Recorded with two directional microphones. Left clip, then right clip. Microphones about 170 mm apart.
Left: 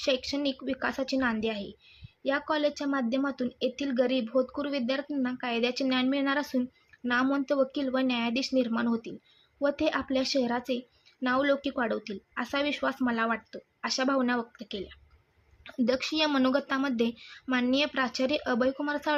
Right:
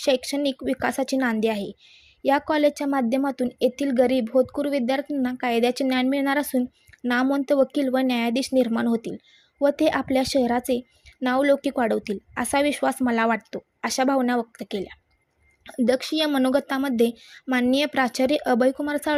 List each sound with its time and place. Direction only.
0.0 s a woman's voice: 40° right (ahead or behind)